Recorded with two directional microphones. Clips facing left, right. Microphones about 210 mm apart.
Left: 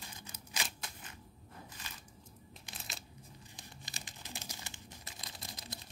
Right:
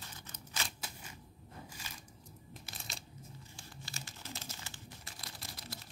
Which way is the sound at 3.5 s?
15° left (ahead or behind).